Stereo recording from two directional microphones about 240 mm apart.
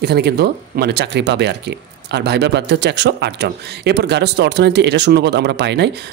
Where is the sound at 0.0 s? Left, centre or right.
Right.